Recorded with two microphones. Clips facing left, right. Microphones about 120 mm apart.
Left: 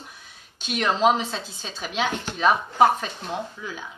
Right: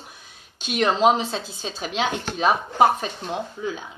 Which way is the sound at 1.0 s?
20° right (ahead or behind).